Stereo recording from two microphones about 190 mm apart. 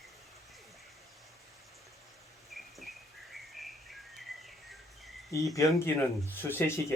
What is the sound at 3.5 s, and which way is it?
Bird, centre (ahead or behind).